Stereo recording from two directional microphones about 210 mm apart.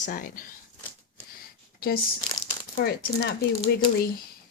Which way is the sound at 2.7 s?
45° left (ahead or behind).